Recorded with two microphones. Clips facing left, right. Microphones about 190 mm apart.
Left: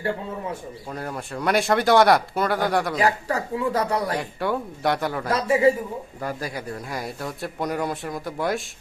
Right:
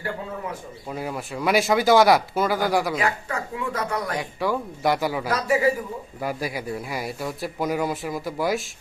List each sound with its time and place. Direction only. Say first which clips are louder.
0.9 s a man's voice: right 2 dB; 5° right (ahead or behind)
3.0 s speech: left 4 dB; 35° left (ahead or behind)
4.2 s a man's voice: even; centre (ahead or behind)
5.3 s a man's voice: left 3 dB; 25° left (ahead or behind)
6.2 s a man's voice: right 3 dB; 10° right (ahead or behind)